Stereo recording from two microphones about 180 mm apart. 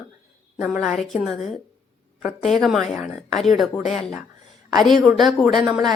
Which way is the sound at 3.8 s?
40° left (ahead or behind).